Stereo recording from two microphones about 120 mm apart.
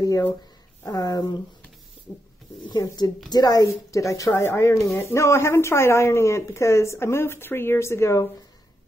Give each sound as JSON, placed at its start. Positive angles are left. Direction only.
{"t": 0.8, "sound": "speech", "side_deg": 30}
{"t": 2.6, "sound": "speech", "side_deg": 35}